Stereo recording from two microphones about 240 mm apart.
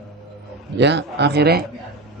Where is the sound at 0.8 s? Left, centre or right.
Right.